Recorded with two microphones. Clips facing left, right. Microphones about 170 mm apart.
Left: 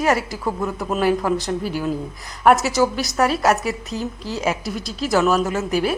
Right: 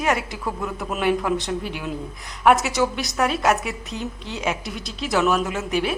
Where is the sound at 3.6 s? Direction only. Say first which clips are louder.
Left 4 dB; 40° left (ahead or behind).